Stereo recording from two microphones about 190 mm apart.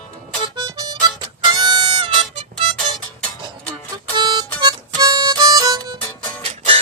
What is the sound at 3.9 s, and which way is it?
Music, 20° right (ahead or behind).